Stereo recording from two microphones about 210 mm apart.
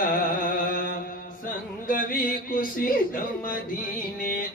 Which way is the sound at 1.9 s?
40° left (ahead or behind).